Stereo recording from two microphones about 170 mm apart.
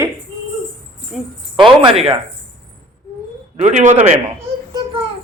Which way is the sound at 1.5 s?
30° right (ahead or behind).